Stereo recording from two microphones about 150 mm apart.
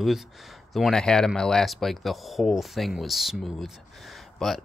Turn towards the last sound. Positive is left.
turn(degrees=0)  # may be behind; listen again after turning